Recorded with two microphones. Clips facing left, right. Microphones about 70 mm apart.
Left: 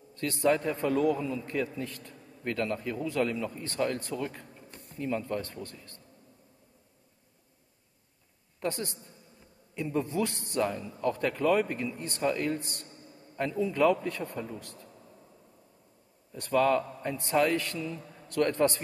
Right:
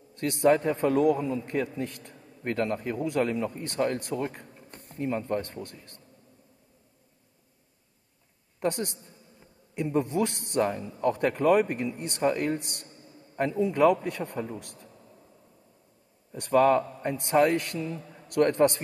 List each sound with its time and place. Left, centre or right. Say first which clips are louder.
0.2 s a man's voice: right 4 dB; right
4.6 s a sound: right 3 dB; right
5.0 s a man's voice: right 3 dB; right
8.6 s a man's voice: right 4 dB; right
11.6 s a man's voice: right 3 dB; right
12.5 s a man's voice: right 2 dB; right
14.4 s a man's voice: right 4 dB; right
16.5 s a man's voice: right 4 dB; right